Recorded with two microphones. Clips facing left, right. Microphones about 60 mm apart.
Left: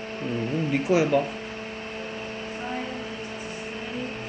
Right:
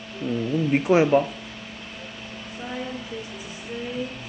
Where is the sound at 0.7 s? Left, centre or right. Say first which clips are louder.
Right 4 dB; right.